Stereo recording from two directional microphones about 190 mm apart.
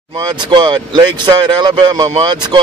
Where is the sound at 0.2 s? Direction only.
25° right (ahead or behind).